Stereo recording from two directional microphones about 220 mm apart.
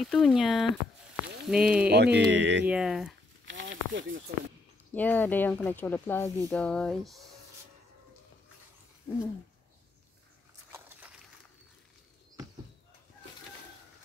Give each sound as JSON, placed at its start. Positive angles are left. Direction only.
{"t": 0.0, "sound": "speech", "side_deg": 0}
{"t": 1.9, "sound": "speech", "side_deg": -50}
{"t": 2.6, "sound": "speech", "side_deg": -5}
{"t": 3.4, "sound": "snake", "side_deg": -55}
{"t": 4.9, "sound": "speech", "side_deg": 10}